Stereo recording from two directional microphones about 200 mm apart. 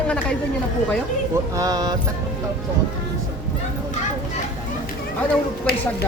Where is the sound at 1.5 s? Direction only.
20° right (ahead or behind).